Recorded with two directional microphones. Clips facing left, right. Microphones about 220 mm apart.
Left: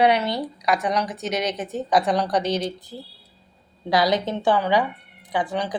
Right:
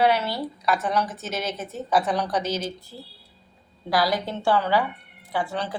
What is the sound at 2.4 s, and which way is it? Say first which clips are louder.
Speech: left 4 dB; 65° left (ahead or behind).